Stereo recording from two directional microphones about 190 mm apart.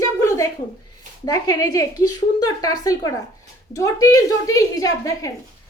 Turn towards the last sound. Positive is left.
turn(degrees=20)  # may be behind; listen again after turning